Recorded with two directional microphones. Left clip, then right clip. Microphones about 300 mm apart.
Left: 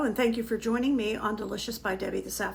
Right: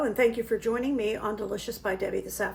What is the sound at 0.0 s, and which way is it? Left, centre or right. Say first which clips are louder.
A woman's voice: right 3 dB; centre.